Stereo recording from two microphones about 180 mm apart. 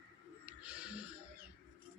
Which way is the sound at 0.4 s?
5° right (ahead or behind).